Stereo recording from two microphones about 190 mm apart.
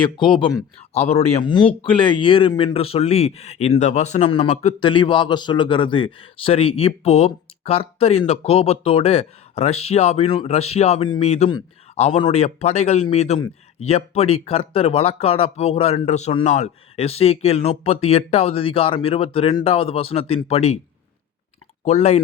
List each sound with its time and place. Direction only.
0.2 s speech: 25° left (ahead or behind)
21.8 s speech: 35° left (ahead or behind)